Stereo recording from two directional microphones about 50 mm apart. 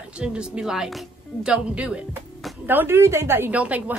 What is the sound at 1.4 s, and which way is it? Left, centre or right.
Speech, right.